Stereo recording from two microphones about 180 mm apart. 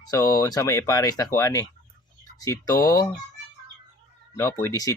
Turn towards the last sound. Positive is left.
turn(degrees=20)  # may be behind; listen again after turning